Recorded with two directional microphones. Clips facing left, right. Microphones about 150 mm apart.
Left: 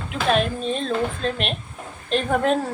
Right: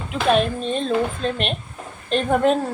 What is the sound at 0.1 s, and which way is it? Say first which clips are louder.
Speech: right 2 dB; centre (ahead or behind).